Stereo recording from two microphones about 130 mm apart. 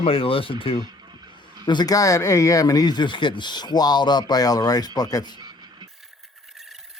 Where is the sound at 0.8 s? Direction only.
30° right (ahead or behind).